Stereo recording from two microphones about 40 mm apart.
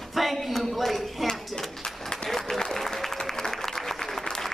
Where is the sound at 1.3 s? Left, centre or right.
Centre.